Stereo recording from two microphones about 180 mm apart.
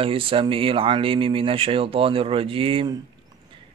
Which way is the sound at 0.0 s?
30° right (ahead or behind).